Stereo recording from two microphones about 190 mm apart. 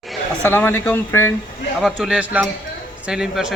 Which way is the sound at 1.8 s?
5° right (ahead or behind).